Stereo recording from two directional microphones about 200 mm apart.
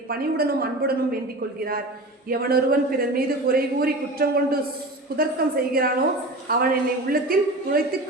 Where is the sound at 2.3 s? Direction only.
50° right (ahead or behind).